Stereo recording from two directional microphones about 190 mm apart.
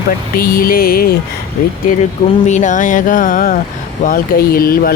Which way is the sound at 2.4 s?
40° left (ahead or behind).